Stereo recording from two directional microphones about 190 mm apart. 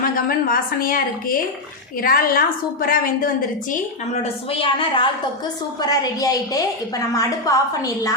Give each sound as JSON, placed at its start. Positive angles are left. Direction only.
{"t": 0.0, "sound": "a woman's voice", "side_deg": 50}